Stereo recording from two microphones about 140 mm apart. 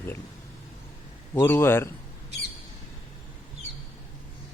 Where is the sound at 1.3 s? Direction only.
15° left (ahead or behind).